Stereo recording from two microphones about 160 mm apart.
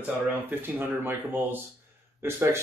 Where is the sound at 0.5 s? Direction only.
15° right (ahead or behind).